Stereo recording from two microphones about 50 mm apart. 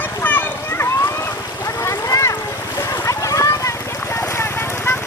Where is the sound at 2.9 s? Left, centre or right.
Left.